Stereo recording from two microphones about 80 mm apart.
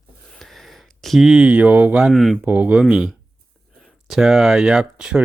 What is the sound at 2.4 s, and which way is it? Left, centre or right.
Speech, right.